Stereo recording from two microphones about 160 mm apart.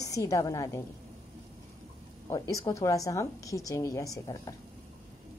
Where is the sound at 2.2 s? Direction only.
20° left (ahead or behind).